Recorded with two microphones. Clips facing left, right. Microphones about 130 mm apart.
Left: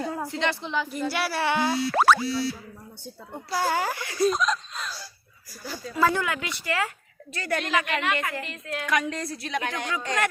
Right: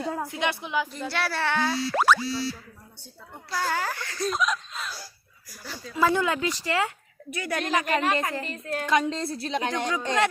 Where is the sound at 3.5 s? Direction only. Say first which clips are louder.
Left 3 dB; 10° left (ahead or behind).